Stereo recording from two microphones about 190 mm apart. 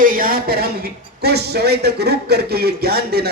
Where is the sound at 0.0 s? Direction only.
45° right (ahead or behind).